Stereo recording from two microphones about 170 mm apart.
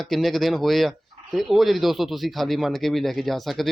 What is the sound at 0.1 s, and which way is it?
Speech, centre (ahead or behind).